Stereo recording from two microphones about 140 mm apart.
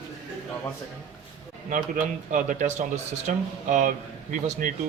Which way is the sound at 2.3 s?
65° right (ahead or behind).